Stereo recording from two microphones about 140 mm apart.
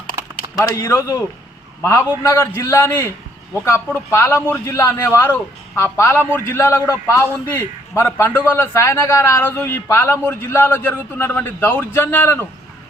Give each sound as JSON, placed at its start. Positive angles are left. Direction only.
{"t": 0.4, "sound": "a sound", "side_deg": -35}
{"t": 0.8, "sound": "a man's voice", "side_deg": 20}
{"t": 5.0, "sound": "a man's voice", "side_deg": 15}